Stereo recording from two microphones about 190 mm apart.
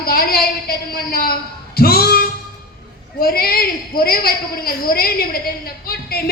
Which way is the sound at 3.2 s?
50° left (ahead or behind).